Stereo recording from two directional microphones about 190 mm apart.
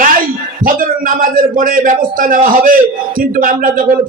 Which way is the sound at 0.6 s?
45° right (ahead or behind).